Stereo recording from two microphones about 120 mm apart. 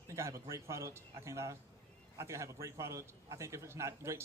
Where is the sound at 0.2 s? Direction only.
25° right (ahead or behind).